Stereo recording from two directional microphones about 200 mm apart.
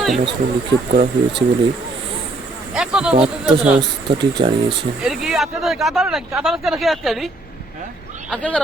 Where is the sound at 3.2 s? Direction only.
5° right (ahead or behind).